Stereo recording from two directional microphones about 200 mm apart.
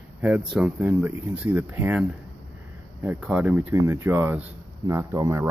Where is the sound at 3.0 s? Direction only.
10° right (ahead or behind).